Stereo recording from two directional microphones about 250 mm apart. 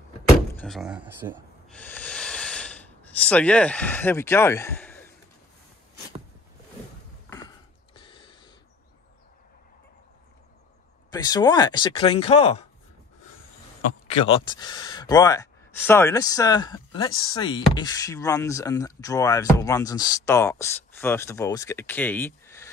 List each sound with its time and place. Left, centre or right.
0.6 s speech: centre
1.7 s snort: centre
7.2 s mechanisms: centre
11.1 s speech: centre
14.0 s speech: left